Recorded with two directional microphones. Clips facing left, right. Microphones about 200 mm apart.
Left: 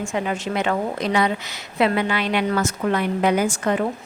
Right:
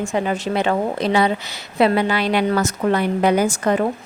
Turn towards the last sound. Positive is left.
turn(degrees=-40)  # may be behind; listen again after turning